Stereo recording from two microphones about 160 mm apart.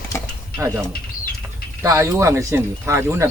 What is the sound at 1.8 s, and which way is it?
Speech, 20° right (ahead or behind).